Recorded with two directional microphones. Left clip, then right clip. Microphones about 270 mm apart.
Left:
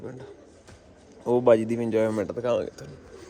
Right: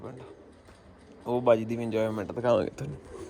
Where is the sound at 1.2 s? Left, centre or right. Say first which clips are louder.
Left 4 dB; centre.